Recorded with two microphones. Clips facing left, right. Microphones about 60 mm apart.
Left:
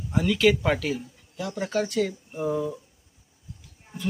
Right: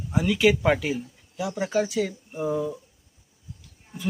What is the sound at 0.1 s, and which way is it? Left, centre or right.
Speech, centre.